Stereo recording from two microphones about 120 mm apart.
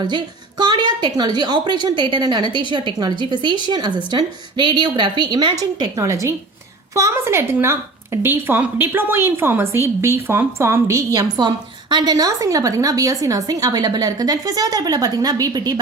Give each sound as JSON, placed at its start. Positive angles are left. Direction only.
{"t": 0.0, "sound": "a woman's voice", "side_deg": -40}
{"t": 6.0, "sound": "a woman's voice", "side_deg": -25}